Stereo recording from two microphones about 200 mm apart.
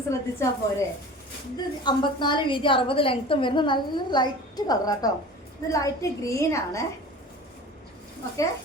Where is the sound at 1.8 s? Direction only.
20° left (ahead or behind).